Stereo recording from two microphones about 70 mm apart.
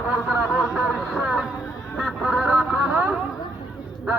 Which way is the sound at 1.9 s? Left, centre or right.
Centre.